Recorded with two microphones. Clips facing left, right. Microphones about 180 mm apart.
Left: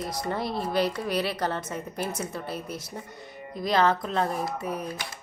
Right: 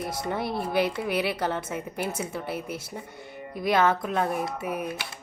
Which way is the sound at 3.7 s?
5° right (ahead or behind).